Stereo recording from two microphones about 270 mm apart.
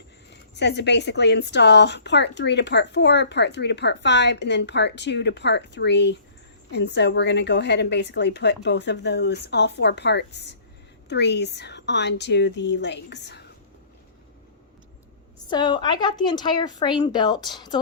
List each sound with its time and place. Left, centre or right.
0.5 s a woman's voice: left
15.4 s a woman's voice: centre